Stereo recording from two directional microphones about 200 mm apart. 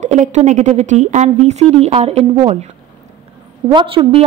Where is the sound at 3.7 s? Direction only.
25° right (ahead or behind).